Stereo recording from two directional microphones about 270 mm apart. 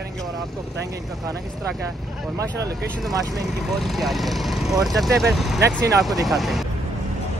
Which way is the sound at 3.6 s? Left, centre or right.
Centre.